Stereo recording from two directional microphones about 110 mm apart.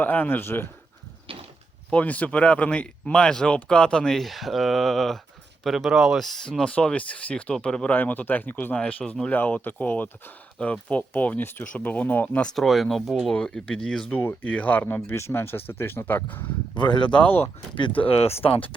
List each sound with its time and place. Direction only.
0.0 s speech: 15° left (ahead or behind)
1.3 s a sound: 55° right (ahead or behind)
1.9 s speech: 15° left (ahead or behind)
14.2 s speech: 15° left (ahead or behind)
16.7 s speech: 45° left (ahead or behind)
17.2 s speech: 20° left (ahead or behind)
17.7 s speech: 50° left (ahead or behind)